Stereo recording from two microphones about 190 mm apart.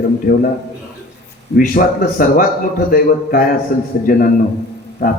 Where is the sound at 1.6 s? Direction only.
50° left (ahead or behind).